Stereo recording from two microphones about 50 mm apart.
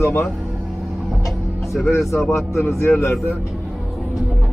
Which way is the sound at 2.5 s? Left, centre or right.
Left.